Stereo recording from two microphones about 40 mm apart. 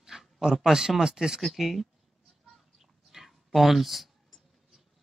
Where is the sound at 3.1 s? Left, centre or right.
Centre.